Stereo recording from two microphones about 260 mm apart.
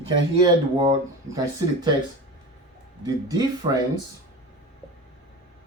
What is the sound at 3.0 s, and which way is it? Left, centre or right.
Speech, centre.